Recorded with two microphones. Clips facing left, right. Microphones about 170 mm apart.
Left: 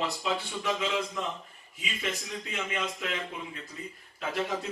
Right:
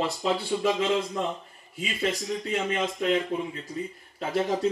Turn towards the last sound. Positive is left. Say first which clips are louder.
# right 5 dB
turn(degrees=-35)  # may be behind; listen again after turning